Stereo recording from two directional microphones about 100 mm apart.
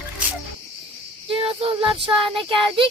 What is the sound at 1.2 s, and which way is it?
Child singing, 65° right (ahead or behind).